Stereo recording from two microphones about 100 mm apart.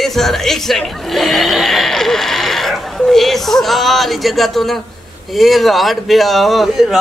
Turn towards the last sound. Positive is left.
turn(degrees=0)  # may be behind; listen again after turning